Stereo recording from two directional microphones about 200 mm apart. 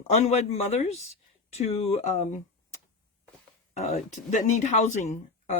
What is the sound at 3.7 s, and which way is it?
Speech, 35° left (ahead or behind).